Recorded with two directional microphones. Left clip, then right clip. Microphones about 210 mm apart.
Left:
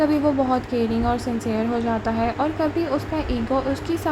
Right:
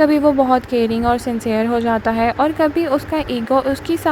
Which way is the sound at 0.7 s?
15° left (ahead or behind).